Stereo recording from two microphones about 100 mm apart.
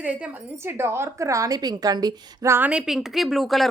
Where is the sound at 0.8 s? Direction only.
25° right (ahead or behind).